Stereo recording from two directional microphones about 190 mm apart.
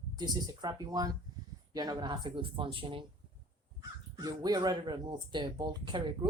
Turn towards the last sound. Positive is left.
turn(degrees=-25)  # may be behind; listen again after turning